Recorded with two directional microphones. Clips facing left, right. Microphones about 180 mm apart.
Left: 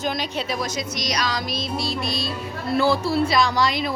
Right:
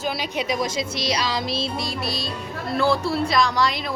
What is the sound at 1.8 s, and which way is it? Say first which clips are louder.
Speech: left 2 dB; 10° right (ahead or behind).